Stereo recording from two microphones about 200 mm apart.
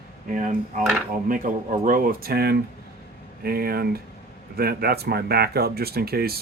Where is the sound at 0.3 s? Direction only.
40° right (ahead or behind).